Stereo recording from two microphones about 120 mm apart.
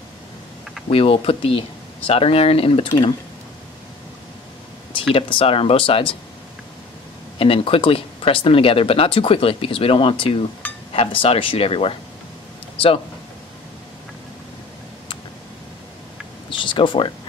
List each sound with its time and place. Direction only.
0.8 s speech: 50° left (ahead or behind)
5.1 s speech: 50° left (ahead or behind)
7.3 s speech: 50° left (ahead or behind)
16.4 s a sound: 45° left (ahead or behind)